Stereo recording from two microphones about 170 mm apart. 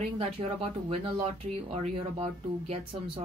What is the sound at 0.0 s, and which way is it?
Speech, 35° right (ahead or behind).